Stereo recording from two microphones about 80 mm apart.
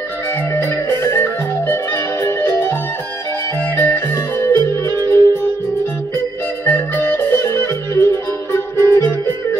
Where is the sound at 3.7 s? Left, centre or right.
Left.